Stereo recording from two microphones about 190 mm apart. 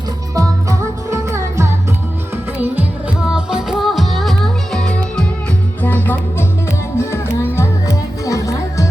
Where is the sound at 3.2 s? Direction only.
5° right (ahead or behind).